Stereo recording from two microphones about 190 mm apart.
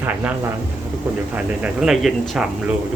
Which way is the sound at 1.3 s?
5° right (ahead or behind).